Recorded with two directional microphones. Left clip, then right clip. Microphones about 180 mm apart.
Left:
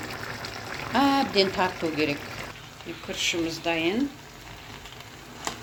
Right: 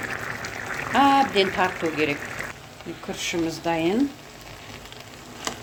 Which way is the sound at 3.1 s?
65° right (ahead or behind).